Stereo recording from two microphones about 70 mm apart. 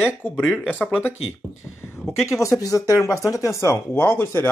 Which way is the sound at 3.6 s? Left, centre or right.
Left.